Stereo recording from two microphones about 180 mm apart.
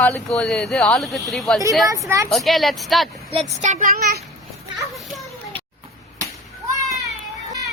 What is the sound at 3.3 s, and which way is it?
Speech, 35° right (ahead or behind).